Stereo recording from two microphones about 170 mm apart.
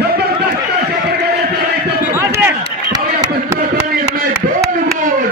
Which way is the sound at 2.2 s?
15° right (ahead or behind).